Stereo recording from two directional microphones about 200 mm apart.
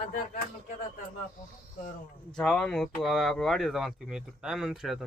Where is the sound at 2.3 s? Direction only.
5° left (ahead or behind).